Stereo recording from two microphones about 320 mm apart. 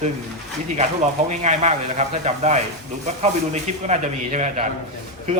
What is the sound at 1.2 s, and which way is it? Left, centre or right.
Speech, right.